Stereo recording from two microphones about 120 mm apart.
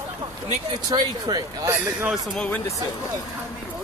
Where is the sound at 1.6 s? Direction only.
15° right (ahead or behind).